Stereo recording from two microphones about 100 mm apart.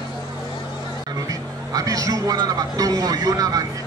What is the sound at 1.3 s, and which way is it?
A man's voice, 35° right (ahead or behind).